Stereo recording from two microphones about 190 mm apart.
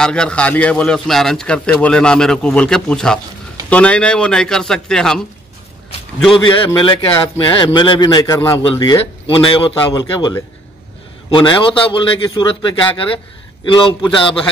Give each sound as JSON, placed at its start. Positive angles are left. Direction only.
{"t": 0.0, "sound": "a man's voice", "side_deg": 5}
{"t": 6.3, "sound": "a man's voice", "side_deg": 25}
{"t": 9.3, "sound": "a man's voice", "side_deg": 30}